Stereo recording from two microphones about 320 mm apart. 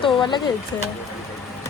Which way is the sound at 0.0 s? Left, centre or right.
Centre.